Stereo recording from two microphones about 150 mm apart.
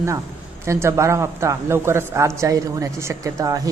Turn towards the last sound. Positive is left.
turn(degrees=-25)  # may be behind; listen again after turning